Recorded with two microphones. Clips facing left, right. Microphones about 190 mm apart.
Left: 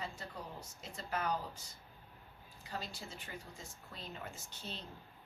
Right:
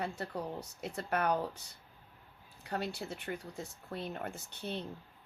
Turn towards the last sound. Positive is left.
turn(degrees=-60)  # may be behind; listen again after turning